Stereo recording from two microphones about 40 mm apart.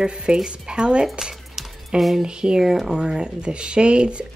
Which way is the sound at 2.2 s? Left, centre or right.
Right.